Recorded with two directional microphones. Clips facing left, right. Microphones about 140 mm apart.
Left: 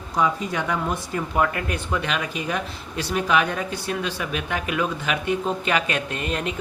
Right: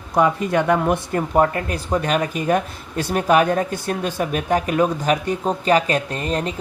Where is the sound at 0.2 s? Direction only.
50° right (ahead or behind).